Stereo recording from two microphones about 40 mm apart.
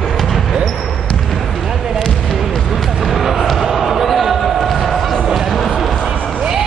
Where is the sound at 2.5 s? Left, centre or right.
Centre.